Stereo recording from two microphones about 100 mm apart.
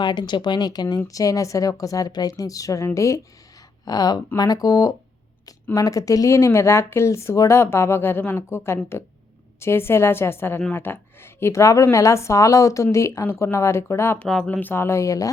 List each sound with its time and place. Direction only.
0.0 s speech: 50° left (ahead or behind); by 14.2 s 25° left (ahead or behind)
14.2 s speech: 10° left (ahead or behind); by 15.3 s 35° left (ahead or behind)